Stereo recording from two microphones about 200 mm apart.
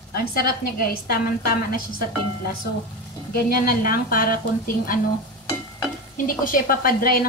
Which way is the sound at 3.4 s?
45° left (ahead or behind).